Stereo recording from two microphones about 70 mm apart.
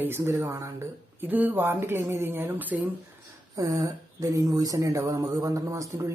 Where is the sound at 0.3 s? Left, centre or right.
Right.